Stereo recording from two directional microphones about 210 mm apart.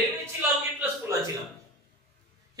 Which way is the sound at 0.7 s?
10° right (ahead or behind).